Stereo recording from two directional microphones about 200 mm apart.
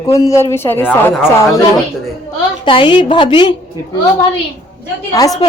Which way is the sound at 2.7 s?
25° left (ahead or behind).